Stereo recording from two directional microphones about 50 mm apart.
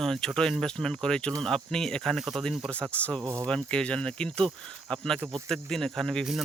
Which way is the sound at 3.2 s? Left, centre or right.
Right.